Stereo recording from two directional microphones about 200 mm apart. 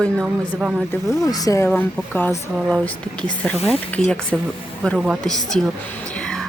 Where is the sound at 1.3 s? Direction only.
20° left (ahead or behind).